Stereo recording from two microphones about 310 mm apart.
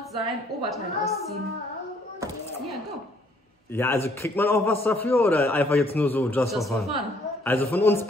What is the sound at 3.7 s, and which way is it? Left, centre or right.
A man's voice, centre.